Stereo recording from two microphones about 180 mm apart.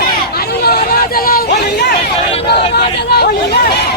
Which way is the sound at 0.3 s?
60° left (ahead or behind).